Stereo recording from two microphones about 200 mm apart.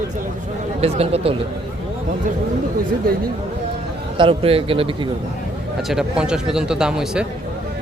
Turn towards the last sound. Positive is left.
turn(degrees=-5)  # may be behind; listen again after turning